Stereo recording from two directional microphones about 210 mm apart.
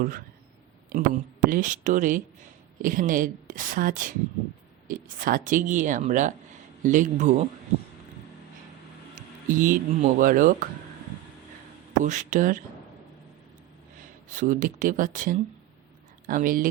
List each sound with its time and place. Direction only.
0.9 s speech: 40° right (ahead or behind)
9.5 s speech: 40° right (ahead or behind)
12.0 s speech: 35° right (ahead or behind)
14.3 s speech: 40° right (ahead or behind)